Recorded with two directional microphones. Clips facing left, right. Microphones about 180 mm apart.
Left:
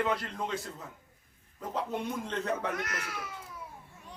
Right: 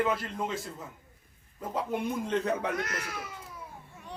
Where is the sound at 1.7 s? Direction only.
10° right (ahead or behind).